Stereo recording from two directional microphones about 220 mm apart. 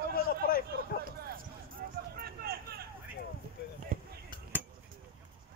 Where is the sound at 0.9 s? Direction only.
40° left (ahead or behind).